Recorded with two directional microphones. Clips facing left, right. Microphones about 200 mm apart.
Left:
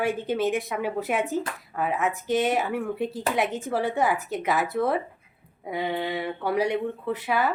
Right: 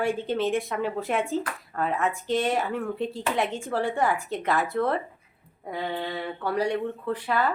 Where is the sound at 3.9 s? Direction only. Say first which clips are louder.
Left 1 dB; 5° left (ahead or behind).